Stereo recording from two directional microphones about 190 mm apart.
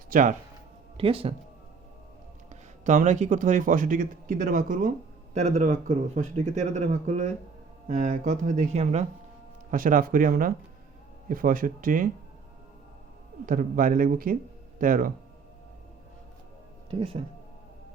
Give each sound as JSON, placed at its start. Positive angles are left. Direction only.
{"t": 0.1, "sound": "speech", "side_deg": -45}
{"t": 0.9, "sound": "speech", "side_deg": -30}
{"t": 2.5, "sound": "a man's voice", "side_deg": -40}
{"t": 13.4, "sound": "a man's voice", "side_deg": -45}
{"t": 16.9, "sound": "speech", "side_deg": -30}